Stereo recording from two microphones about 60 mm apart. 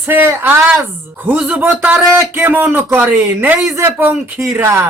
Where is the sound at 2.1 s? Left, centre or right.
Right.